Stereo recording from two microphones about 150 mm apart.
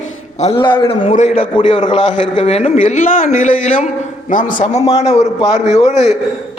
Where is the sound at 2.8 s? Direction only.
55° left (ahead or behind).